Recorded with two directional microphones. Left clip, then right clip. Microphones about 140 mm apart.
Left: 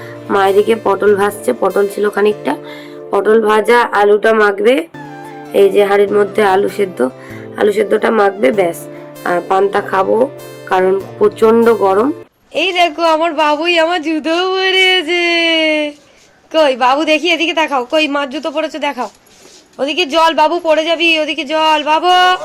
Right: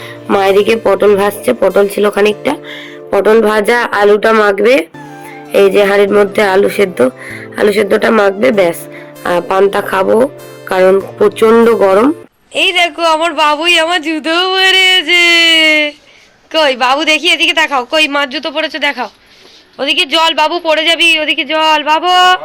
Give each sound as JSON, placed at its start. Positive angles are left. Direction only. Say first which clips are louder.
{"t": 0.3, "sound": "speech", "louder": "right 2 dB", "side_deg": -25}
{"t": 3.1, "sound": "speech", "louder": "right 2 dB", "side_deg": -25}
{"t": 11.7, "sound": "speech", "louder": "right 3 dB", "side_deg": -40}
{"t": 12.5, "sound": "a man's voice", "louder": "right 2 dB", "side_deg": 0}